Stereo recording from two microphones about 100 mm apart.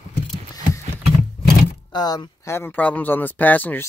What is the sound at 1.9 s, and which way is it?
Speech, 45° left (ahead or behind).